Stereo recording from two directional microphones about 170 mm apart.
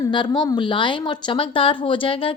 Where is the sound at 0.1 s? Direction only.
25° left (ahead or behind).